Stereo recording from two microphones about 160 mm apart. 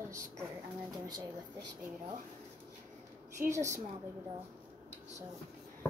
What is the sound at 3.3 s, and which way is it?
Speech, 20° right (ahead or behind).